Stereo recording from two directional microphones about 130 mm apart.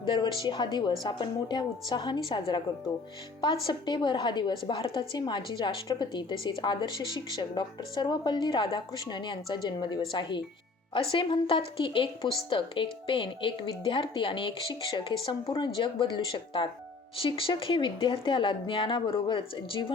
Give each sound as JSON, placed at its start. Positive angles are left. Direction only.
{"t": 0.0, "sound": "a woman's voice", "side_deg": 35}